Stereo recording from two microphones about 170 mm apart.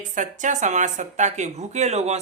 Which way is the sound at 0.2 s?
45° right (ahead or behind).